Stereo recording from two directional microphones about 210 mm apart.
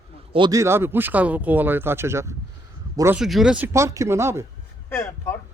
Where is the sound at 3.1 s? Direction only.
Centre (ahead or behind).